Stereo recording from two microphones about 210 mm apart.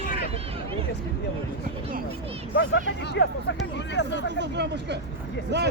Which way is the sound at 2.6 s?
60° left (ahead or behind).